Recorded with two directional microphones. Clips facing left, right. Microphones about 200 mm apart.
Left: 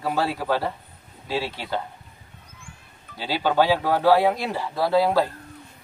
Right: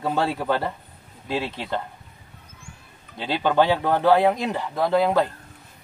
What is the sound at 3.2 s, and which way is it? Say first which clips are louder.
Speech: right 1 dB; 5° left (ahead or behind).